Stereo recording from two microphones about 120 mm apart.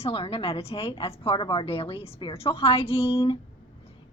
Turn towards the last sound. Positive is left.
turn(degrees=50)  # may be behind; listen again after turning